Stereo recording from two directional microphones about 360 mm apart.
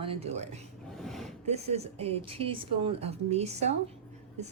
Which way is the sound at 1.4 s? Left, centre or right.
Centre.